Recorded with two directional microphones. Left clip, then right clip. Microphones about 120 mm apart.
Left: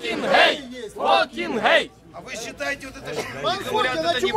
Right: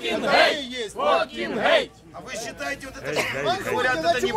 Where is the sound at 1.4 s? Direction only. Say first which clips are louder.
Left 2 dB; 20° left (ahead or behind).